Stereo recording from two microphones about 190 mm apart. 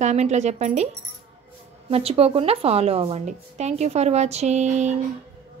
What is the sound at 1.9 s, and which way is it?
A woman's voice, 30° right (ahead or behind).